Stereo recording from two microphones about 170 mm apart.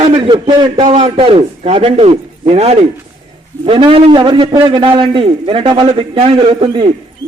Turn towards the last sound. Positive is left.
turn(degrees=-30)  # may be behind; listen again after turning